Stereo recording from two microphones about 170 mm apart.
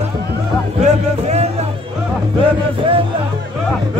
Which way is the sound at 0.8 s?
40° right (ahead or behind).